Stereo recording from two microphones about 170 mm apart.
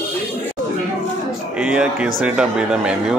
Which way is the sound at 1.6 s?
5° right (ahead or behind).